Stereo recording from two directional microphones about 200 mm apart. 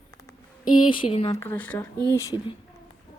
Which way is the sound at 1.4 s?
10° left (ahead or behind).